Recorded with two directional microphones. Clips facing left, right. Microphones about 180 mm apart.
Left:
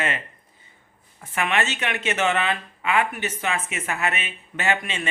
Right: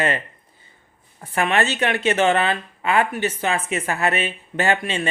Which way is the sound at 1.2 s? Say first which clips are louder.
Right 4 dB; 35° right (ahead or behind).